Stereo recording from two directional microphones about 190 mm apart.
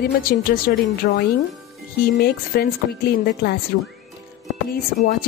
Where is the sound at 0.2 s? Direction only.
50° left (ahead or behind).